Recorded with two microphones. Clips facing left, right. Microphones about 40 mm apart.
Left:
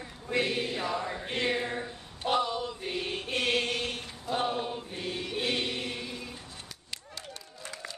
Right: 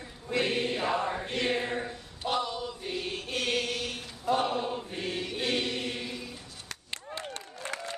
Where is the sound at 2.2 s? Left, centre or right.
Centre.